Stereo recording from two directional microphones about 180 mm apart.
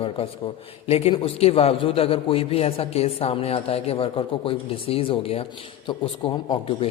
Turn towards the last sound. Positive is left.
turn(degrees=25)  # may be behind; listen again after turning